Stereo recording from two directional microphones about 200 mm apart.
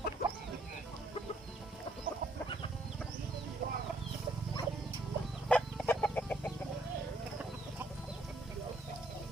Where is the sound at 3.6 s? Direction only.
50° right (ahead or behind).